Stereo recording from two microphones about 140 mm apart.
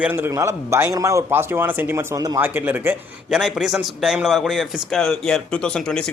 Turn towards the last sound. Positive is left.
turn(degrees=5)  # may be behind; listen again after turning